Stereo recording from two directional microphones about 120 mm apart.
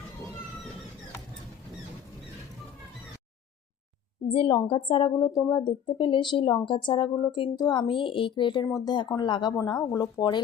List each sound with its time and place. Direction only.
4.3 s a woman's voice: 50° left (ahead or behind)